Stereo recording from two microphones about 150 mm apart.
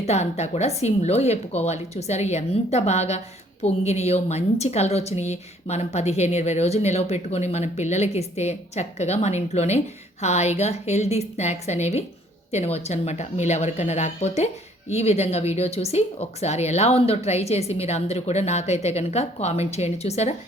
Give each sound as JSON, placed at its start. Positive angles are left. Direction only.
{"t": 0.0, "sound": "speech", "side_deg": 45}